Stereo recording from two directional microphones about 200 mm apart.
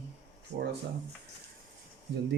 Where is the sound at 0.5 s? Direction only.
35° right (ahead or behind).